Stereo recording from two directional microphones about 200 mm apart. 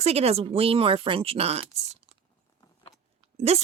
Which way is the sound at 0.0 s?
30° right (ahead or behind).